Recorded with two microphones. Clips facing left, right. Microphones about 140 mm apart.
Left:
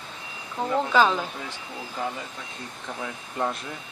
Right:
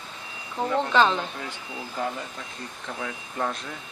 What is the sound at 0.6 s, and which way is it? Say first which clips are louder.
Speech: even; 5° left (ahead or behind).